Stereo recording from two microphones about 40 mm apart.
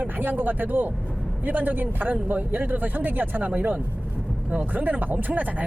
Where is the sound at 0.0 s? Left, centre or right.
Right.